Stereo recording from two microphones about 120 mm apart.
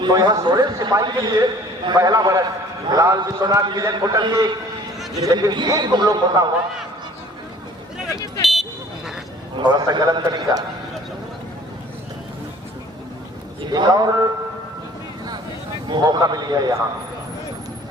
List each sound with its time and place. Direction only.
0.0 s a man's voice: 35° right (ahead or behind)
9.6 s a man's voice: 40° right (ahead or behind)
13.7 s a man's voice: 35° right (ahead or behind)
15.9 s a man's voice: 35° right (ahead or behind)